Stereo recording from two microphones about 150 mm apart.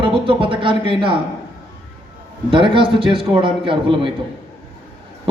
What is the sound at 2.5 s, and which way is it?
Speech, 35° right (ahead or behind).